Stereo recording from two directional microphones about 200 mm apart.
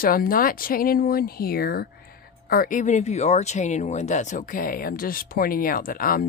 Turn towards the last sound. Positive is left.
turn(degrees=45)  # may be behind; listen again after turning